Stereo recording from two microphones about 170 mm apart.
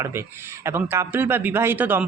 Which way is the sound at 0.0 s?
15° right (ahead or behind).